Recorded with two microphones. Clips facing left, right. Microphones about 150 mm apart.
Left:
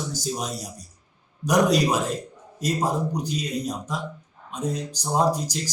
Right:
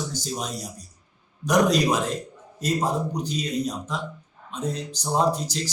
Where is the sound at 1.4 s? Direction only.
10° left (ahead or behind).